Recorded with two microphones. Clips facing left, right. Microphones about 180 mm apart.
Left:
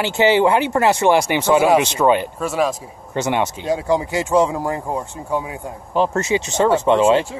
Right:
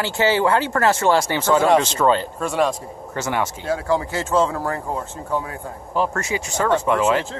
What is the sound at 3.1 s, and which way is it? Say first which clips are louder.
Speech: left 4 dB; 20° left (ahead or behind).